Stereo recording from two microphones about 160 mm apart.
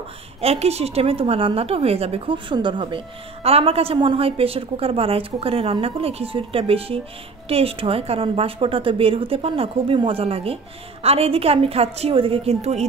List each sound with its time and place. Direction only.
0.4 s a woman's voice: 40° right (ahead or behind)